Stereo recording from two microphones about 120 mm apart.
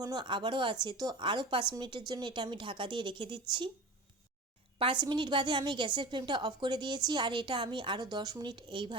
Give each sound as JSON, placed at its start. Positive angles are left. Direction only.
{"t": 0.0, "sound": "a woman's voice", "side_deg": -35}
{"t": 4.8, "sound": "a woman's voice", "side_deg": -45}